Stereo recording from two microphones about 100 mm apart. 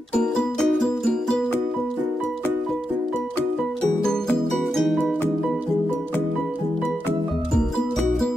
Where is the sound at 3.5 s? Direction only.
5° left (ahead or behind).